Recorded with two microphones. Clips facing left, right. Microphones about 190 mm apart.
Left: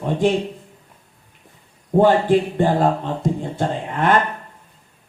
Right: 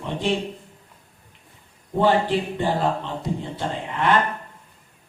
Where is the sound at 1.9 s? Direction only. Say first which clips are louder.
Left 5 dB; 50° left (ahead or behind).